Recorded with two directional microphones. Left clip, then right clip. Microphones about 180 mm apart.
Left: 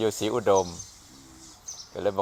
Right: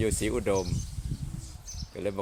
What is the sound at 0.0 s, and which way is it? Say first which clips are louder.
Speech: left 4 dB; 50° right (ahead or behind).